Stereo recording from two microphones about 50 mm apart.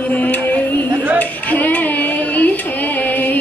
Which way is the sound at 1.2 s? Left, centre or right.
Left.